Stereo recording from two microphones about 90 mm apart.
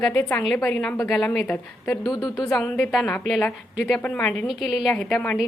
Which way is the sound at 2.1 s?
50° left (ahead or behind).